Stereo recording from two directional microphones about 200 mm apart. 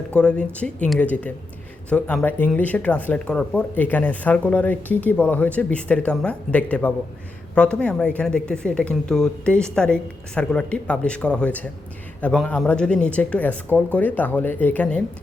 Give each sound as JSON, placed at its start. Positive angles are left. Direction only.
{"t": 0.1, "sound": "speech", "side_deg": 5}